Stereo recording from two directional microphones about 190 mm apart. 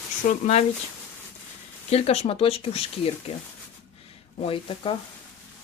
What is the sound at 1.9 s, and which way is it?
Speech, 35° left (ahead or behind).